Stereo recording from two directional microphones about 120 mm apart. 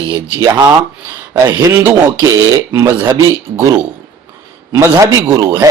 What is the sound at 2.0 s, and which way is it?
Speech, 25° right (ahead or behind).